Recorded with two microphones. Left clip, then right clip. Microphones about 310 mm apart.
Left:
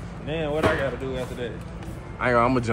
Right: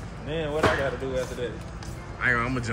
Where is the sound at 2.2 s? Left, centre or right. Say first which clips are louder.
Left 4 dB; centre.